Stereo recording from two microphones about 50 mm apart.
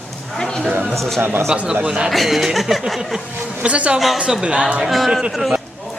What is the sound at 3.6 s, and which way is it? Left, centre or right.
Speech, right.